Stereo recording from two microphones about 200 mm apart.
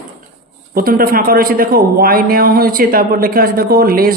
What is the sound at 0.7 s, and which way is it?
A man's voice, 45° right (ahead or behind).